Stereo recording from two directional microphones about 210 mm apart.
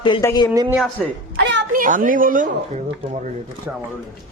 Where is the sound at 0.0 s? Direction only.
20° left (ahead or behind).